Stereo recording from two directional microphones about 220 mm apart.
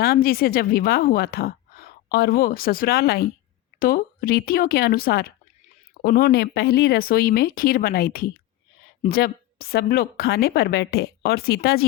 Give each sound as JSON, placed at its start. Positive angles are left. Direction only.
{"t": 0.0, "sound": "a woman's voice", "side_deg": 45}